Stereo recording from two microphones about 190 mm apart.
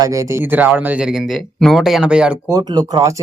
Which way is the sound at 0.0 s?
15° right (ahead or behind).